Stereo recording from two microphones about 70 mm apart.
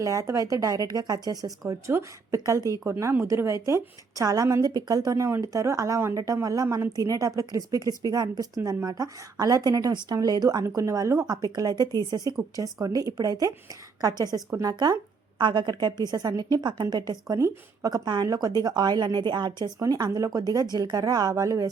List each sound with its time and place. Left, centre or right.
0.0 s a woman's voice: right
1.9 s a woman's voice: right
2.7 s a woman's voice: left
3.0 s a woman's voice: right
4.4 s a woman's voice: right
4.7 s a woman's voice: right
6.1 s a woman's voice: right
10.8 s a woman's voice: right
11.3 s a woman's voice: right
12.5 s a woman's voice: right
15.4 s a woman's voice: right
16.9 s a woman's voice: right
19.8 s a woman's voice: right